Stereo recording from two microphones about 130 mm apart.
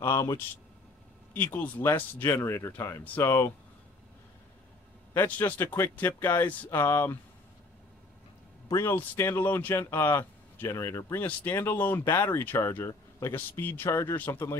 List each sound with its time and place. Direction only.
0.0 s speech: 25° left (ahead or behind)
1.3 s speech: 10° left (ahead or behind)
5.1 s speech: 15° left (ahead or behind)
8.8 s speech: 15° left (ahead or behind)